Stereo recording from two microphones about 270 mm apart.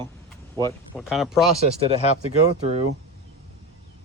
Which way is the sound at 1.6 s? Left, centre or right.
Right.